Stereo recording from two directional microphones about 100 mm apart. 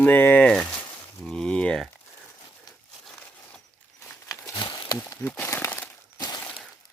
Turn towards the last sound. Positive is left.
turn(degrees=40)  # may be behind; listen again after turning